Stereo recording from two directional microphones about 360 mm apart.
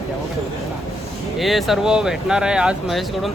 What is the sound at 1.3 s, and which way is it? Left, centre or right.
Speech, centre.